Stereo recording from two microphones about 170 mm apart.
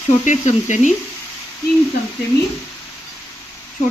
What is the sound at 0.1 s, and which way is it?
Speech, 45° left (ahead or behind).